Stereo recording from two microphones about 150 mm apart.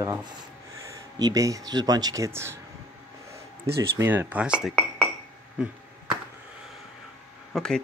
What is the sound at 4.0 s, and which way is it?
Speech, 15° right (ahead or behind).